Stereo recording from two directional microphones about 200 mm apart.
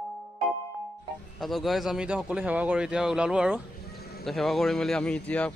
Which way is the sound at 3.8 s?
50° left (ahead or behind).